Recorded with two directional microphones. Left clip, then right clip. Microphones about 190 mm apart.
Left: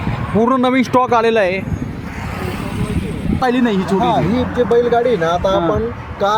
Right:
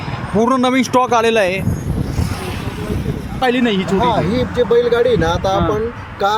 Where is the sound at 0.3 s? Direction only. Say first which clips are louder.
Even; 10° right (ahead or behind).